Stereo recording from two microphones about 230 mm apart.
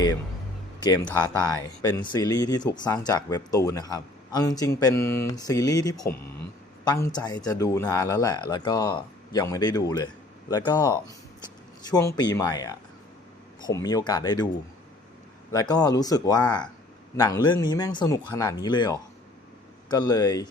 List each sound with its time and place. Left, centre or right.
0.9 s speech: centre
15.6 s speech: centre